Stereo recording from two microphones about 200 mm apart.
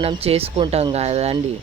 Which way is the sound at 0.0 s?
30° right (ahead or behind).